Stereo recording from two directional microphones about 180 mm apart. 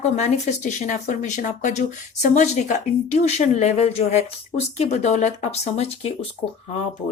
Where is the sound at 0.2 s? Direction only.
40° left (ahead or behind).